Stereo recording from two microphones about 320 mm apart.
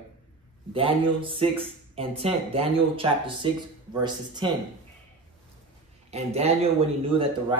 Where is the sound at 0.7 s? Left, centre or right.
Centre.